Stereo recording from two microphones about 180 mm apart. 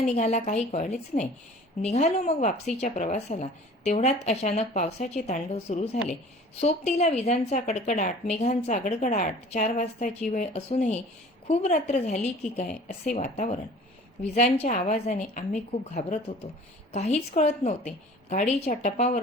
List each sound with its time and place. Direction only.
0.2 s speech: 40° left (ahead or behind)